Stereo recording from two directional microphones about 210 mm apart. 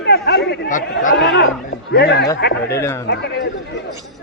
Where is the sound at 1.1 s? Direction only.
50° left (ahead or behind).